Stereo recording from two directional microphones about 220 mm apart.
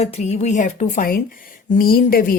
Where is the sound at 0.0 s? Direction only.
30° left (ahead or behind).